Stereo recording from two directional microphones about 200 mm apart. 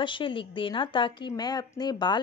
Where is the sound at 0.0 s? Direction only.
25° left (ahead or behind).